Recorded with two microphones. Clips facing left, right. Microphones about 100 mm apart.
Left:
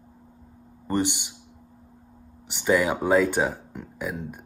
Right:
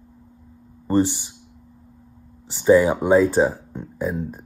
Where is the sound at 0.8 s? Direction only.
30° right (ahead or behind).